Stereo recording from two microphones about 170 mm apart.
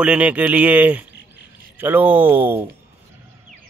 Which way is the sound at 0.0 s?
5° right (ahead or behind).